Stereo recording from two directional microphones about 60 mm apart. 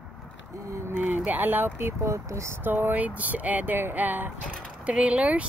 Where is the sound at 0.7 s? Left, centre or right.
Right.